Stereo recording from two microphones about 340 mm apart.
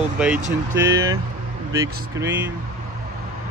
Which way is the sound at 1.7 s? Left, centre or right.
Centre.